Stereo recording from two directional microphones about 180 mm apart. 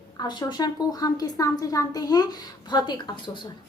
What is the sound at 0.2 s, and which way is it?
A woman's voice, 25° left (ahead or behind).